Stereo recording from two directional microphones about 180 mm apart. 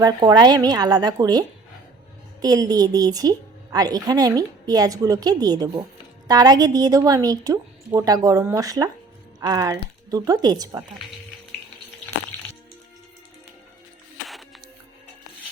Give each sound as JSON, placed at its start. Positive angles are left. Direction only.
{"t": 0.0, "sound": "a woman's voice", "side_deg": -20}